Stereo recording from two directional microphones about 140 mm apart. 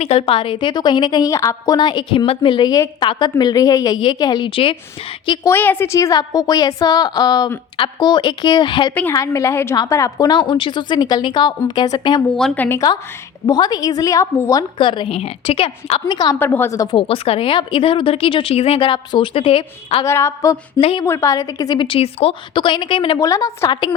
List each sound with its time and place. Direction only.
0.0 s a woman's voice: 45° left (ahead or behind)
5.5 s a woman's voice: 15° left (ahead or behind); by 8.9 s 35° left (ahead or behind)
9.1 s a woman's voice: 20° left (ahead or behind)
12.5 s speech: 15° left (ahead or behind)
13.5 s a woman's voice: 30° left (ahead or behind)
14.8 s a woman's voice: 35° left (ahead or behind)
16.1 s a woman's voice: 30° left (ahead or behind)
16.4 s a woman's voice: 15° left (ahead or behind)
17.0 s a woman's voice: 45° left (ahead or behind)
20.1 s a woman's voice: 20° left (ahead or behind)
20.7 s a woman's voice: 35° left (ahead or behind)
21.0 s a woman's voice: 20° left (ahead or behind); by 23.2 s 35° left (ahead or behind)
23.2 s a woman's voice: 25° left (ahead or behind)